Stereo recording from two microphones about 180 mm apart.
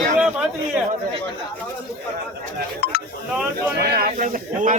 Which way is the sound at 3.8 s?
55° right (ahead or behind).